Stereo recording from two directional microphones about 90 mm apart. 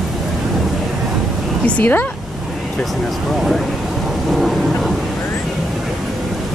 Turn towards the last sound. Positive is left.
turn(degrees=0)  # may be behind; listen again after turning